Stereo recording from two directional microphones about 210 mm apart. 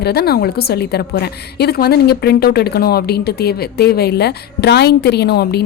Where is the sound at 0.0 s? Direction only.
50° left (ahead or behind).